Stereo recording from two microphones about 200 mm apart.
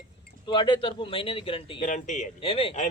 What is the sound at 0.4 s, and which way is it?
Speech, 25° left (ahead or behind).